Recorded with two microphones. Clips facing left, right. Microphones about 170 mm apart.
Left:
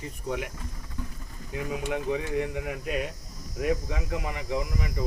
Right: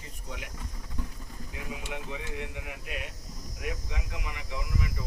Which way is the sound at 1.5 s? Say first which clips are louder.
Left 9 dB; 50° left (ahead or behind).